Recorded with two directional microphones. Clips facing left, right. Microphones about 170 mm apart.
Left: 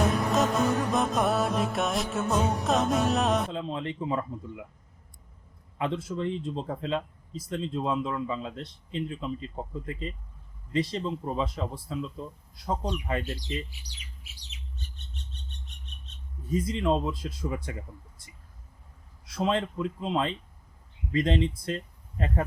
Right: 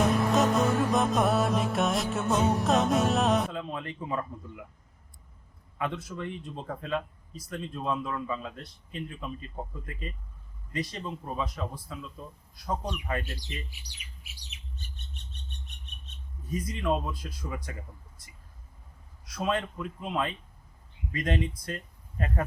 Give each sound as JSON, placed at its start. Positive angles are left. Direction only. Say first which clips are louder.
{"t": 0.0, "sound": "music", "louder": "right 1 dB", "side_deg": 0}
{"t": 3.5, "sound": "speech", "louder": "left 3 dB", "side_deg": 25}
{"t": 5.7, "sound": "speech", "louder": "left 3 dB", "side_deg": 25}
{"t": 16.5, "sound": "speech", "louder": "left 3 dB", "side_deg": 25}
{"t": 19.2, "sound": "speech", "louder": "left 3 dB", "side_deg": 25}